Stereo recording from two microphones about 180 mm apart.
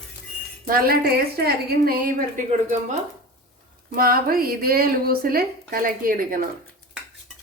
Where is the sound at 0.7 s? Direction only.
55° right (ahead or behind).